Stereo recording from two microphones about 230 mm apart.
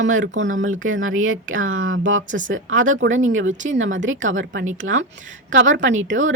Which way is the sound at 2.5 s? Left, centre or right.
Right.